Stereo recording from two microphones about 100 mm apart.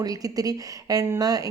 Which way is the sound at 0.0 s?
40° right (ahead or behind).